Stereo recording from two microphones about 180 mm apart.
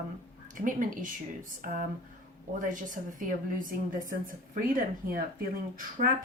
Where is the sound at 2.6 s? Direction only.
45° right (ahead or behind).